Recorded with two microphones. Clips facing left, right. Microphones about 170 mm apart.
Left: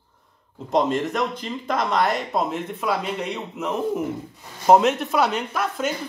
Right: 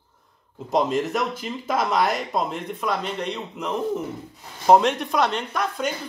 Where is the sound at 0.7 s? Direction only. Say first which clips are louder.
Left 1 dB; centre (ahead or behind).